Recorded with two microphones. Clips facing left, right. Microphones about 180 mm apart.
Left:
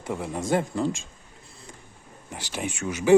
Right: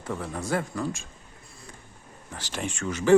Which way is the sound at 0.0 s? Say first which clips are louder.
Left 2 dB; 15° left (ahead or behind).